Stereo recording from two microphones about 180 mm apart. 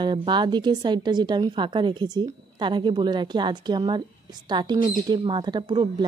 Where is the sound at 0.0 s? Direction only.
25° right (ahead or behind).